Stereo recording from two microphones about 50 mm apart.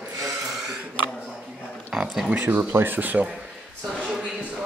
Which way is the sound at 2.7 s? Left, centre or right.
Right.